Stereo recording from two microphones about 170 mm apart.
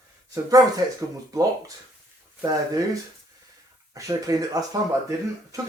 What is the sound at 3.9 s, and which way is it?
Speech, 20° right (ahead or behind).